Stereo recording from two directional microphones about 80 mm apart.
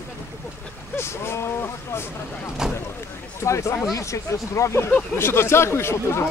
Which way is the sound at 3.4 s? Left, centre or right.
Left.